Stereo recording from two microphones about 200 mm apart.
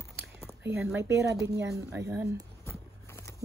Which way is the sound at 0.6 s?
5° right (ahead or behind).